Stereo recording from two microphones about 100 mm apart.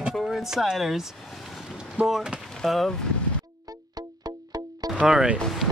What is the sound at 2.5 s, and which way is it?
Speech, centre (ahead or behind).